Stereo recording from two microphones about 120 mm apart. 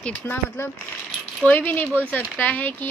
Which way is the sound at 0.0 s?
15° left (ahead or behind).